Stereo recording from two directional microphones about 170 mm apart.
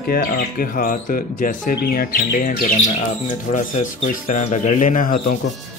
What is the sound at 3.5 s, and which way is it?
Speech, 50° left (ahead or behind).